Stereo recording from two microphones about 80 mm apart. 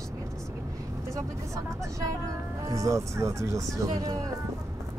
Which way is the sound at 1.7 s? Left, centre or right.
Right.